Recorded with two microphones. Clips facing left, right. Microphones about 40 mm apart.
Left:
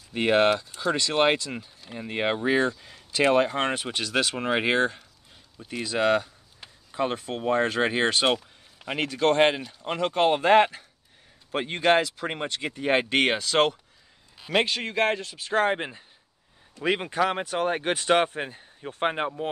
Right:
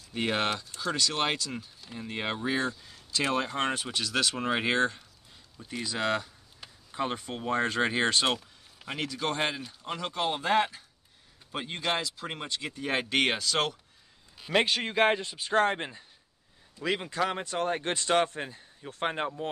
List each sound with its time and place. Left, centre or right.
0.1 s speech: left
8.3 s a sound: centre
9.0 s speech: left
14.4 s a man's voice: centre
15.4 s speech: centre
16.8 s speech: left